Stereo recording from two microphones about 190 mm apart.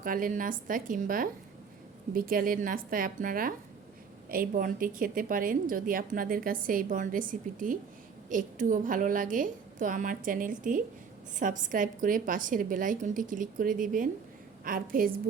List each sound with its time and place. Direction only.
0.0 s a woman's voice: 45° right (ahead or behind)